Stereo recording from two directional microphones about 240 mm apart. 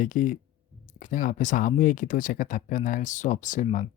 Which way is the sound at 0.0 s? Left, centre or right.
Left.